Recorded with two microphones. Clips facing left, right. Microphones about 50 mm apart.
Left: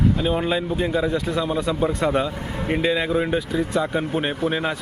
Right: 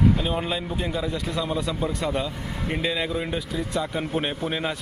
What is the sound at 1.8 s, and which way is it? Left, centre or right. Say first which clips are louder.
Speech: left 5 dB; left.